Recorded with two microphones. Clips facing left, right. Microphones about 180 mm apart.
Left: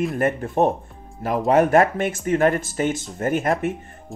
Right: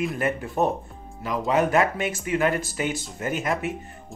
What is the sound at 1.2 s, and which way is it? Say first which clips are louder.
Speech: left 5 dB; 50° left (ahead or behind).